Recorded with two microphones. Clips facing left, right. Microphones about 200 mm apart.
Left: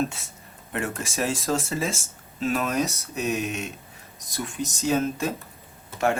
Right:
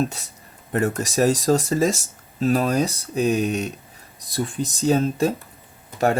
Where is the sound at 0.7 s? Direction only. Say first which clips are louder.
Right 7 dB; 40° right (ahead or behind).